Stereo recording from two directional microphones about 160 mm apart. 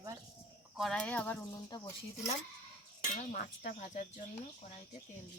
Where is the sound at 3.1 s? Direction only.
50° left (ahead or behind).